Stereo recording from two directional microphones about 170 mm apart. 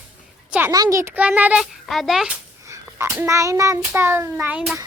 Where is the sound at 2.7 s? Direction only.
15° right (ahead or behind).